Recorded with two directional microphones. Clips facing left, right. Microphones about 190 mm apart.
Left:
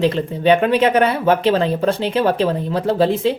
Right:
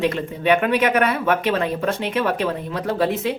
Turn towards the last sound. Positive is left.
turn(degrees=30)  # may be behind; listen again after turning